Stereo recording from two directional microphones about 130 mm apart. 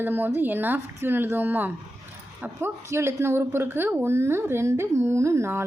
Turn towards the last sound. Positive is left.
turn(degrees=-20)  # may be behind; listen again after turning